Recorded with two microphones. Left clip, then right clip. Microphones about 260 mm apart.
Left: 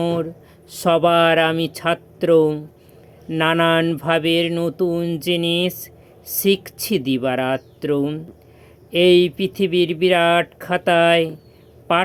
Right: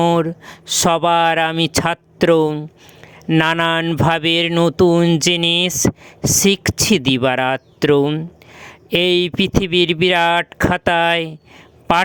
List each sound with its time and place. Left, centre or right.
0.0 s speech: right